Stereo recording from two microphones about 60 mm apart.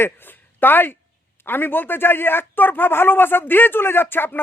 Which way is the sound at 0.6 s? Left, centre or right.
Left.